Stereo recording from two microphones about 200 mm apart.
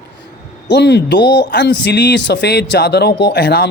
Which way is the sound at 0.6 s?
55° left (ahead or behind).